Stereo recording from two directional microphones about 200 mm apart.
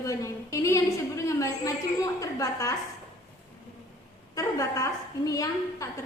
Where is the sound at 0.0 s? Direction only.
15° left (ahead or behind).